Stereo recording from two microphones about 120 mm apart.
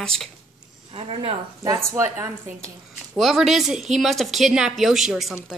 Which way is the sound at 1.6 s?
25° right (ahead or behind).